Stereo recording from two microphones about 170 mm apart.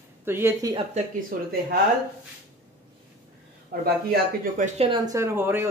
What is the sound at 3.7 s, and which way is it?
Speech, 65° right (ahead or behind).